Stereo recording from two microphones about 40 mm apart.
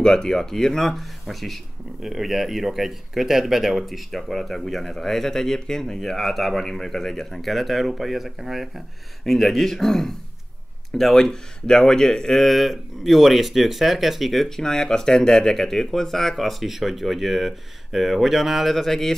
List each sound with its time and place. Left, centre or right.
0.0 s speech: centre
5.9 s speech: centre
12.4 s speech: centre
14.6 s speech: centre